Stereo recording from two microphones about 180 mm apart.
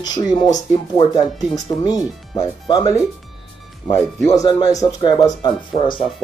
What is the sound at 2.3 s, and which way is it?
Speech, 20° left (ahead or behind).